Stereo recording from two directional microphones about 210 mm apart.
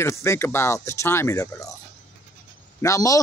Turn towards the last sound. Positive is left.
turn(degrees=15)  # may be behind; listen again after turning